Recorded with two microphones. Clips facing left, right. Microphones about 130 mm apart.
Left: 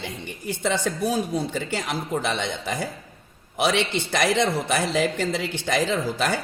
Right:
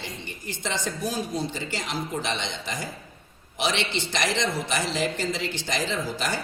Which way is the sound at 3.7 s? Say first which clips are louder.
Left 5 dB; 10° left (ahead or behind).